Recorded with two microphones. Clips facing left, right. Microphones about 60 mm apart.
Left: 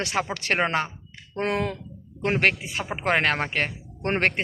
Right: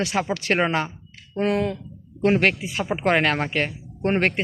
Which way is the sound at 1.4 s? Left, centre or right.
Left.